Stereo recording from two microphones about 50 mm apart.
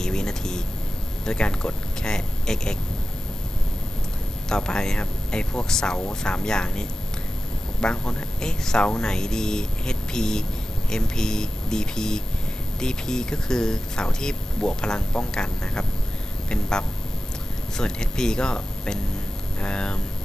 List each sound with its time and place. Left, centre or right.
0.0 s air conditioning: centre
1.2 s speech: centre
4.4 s speech: centre